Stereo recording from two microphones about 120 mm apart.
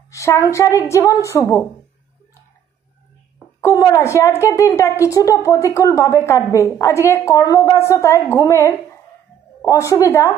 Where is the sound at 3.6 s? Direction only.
25° left (ahead or behind).